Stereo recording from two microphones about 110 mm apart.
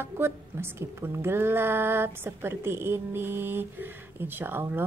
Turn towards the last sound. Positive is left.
turn(degrees=-20)  # may be behind; listen again after turning